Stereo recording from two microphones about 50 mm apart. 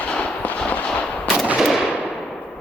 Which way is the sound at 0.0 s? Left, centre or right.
Left.